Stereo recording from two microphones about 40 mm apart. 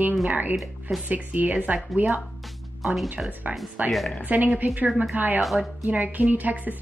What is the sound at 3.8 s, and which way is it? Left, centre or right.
A woman's voice, right.